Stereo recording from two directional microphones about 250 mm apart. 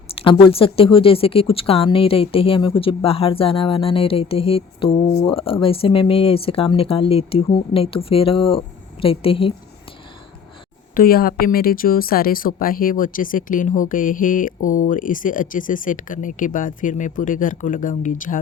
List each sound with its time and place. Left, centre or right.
0.1 s speech: left
10.9 s speech: left